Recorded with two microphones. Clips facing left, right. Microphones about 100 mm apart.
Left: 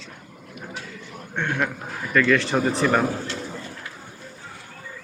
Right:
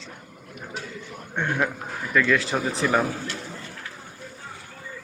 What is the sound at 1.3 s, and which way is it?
A man's voice, 10° right (ahead or behind).